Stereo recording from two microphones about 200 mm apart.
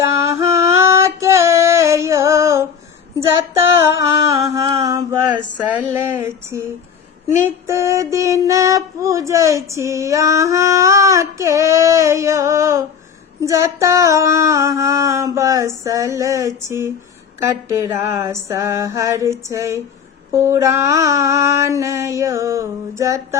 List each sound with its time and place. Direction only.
0.0 s female singing: 15° right (ahead or behind)
4.0 s female singing: 15° right (ahead or behind)